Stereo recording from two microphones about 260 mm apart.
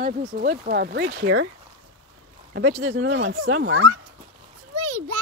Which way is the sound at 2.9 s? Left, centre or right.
Right.